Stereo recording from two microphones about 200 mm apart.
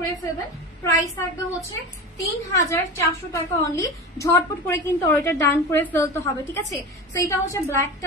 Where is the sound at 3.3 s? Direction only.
15° left (ahead or behind).